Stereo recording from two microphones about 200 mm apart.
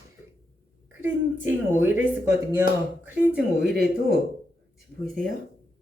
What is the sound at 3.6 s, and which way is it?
Speech, 55° right (ahead or behind).